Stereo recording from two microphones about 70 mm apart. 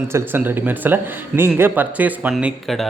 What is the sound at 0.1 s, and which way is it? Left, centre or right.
A man's voice, right.